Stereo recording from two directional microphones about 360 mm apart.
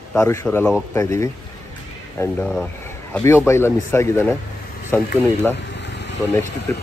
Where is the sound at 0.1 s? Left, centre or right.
Centre.